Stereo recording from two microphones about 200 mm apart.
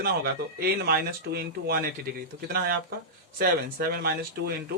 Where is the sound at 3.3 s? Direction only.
50° right (ahead or behind).